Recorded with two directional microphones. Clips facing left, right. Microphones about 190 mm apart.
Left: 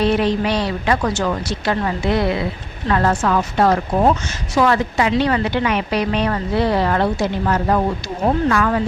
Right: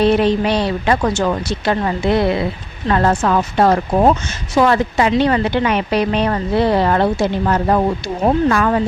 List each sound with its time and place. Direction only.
0.0 s speech: 25° right (ahead or behind)